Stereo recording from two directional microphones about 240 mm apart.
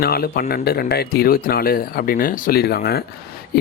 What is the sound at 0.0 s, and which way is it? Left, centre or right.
Speech, left.